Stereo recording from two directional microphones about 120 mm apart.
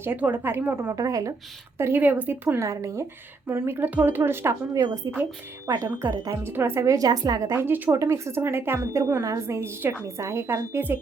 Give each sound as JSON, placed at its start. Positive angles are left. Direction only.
{"t": 0.0, "sound": "speech", "side_deg": -15}
{"t": 1.8, "sound": "speech", "side_deg": -15}